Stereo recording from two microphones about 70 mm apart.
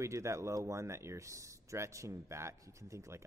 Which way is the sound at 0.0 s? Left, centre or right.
Right.